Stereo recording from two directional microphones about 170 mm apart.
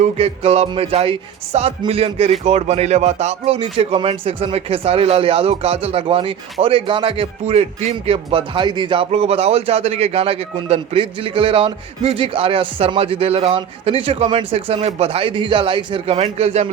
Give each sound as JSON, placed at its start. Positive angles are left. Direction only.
{"t": 0.0, "sound": "speech", "side_deg": -40}